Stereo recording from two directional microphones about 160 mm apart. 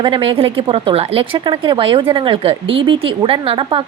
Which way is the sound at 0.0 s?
35° right (ahead or behind).